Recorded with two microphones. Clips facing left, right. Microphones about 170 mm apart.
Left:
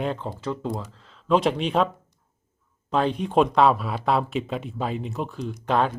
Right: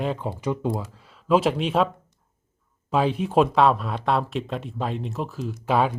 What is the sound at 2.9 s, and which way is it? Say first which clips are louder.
Speech: right 1 dB; 5° right (ahead or behind).